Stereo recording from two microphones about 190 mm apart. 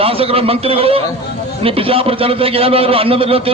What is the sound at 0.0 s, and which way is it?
A man's voice, 30° right (ahead or behind).